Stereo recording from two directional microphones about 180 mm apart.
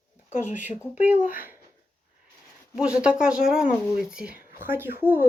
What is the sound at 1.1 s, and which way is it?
Speech, 45° left (ahead or behind).